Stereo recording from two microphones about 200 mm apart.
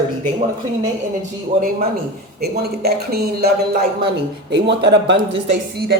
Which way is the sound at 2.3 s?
50° right (ahead or behind).